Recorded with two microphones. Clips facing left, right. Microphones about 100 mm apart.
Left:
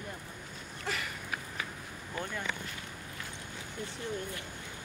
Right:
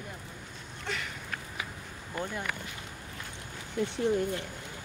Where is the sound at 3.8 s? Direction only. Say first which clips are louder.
Right 11 dB; 90° right.